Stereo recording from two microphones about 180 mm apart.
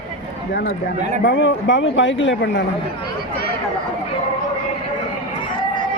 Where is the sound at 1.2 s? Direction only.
80° left.